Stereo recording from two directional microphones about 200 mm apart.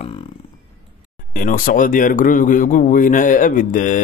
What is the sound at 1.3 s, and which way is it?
Speech, 40° left (ahead or behind).